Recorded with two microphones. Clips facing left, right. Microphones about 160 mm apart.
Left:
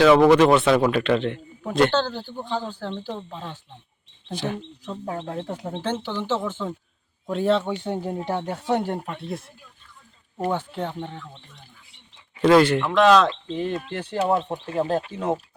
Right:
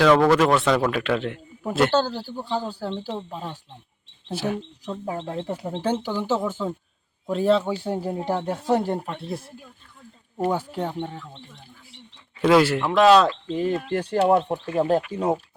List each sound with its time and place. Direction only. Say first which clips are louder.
0.0 s a man's voice: left 3 dB; 5° left (ahead or behind)
12.4 s a man's voice: left 1 dB; 5° right (ahead or behind)
13.7 s speech: right 5 dB; 45° right (ahead or behind)
14.3 s a man's voice: right 2 dB; 10° right (ahead or behind)